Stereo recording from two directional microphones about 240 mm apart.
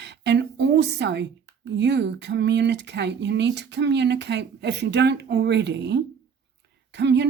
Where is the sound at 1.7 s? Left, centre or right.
Right.